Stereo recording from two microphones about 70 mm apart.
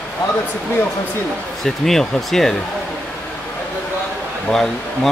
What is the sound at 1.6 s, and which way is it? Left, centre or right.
Speech, centre.